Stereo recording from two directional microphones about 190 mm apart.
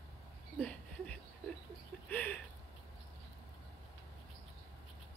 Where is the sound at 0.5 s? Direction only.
5° left (ahead or behind).